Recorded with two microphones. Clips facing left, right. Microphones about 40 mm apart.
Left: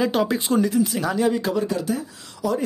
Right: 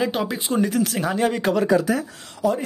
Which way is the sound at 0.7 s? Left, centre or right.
Right.